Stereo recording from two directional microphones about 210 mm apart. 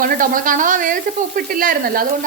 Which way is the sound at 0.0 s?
40° right (ahead or behind).